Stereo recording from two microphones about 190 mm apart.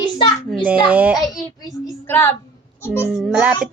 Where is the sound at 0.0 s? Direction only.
25° left (ahead or behind).